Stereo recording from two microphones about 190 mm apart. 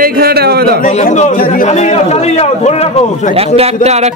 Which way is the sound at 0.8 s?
40° left (ahead or behind).